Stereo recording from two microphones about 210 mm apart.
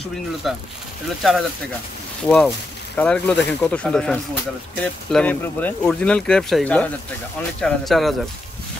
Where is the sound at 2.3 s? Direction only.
5° left (ahead or behind).